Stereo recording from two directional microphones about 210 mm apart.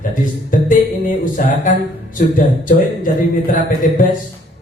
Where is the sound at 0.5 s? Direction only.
40° left (ahead or behind).